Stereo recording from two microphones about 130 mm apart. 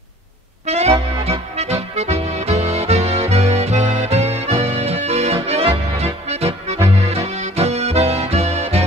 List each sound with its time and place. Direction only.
0.7 s music: 55° right (ahead or behind)